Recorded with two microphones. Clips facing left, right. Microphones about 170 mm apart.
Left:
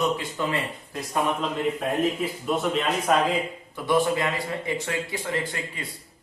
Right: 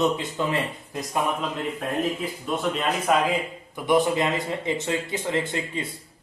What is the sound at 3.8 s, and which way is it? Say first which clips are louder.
A man's voice: right 2 dB; 20° right (ahead or behind).